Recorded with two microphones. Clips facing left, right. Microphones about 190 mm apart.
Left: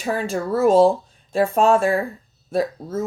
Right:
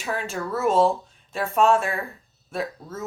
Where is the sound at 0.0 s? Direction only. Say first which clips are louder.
Left 5 dB; 35° left (ahead or behind).